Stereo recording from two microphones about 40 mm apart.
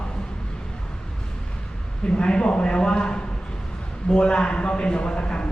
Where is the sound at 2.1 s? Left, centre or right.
Left.